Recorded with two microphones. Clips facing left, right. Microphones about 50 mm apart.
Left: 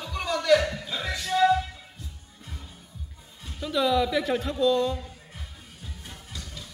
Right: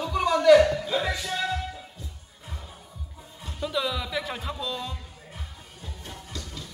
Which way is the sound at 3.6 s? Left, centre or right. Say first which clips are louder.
Left 5 dB; centre.